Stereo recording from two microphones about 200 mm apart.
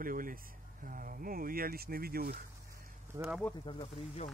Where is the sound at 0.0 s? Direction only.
45° right (ahead or behind).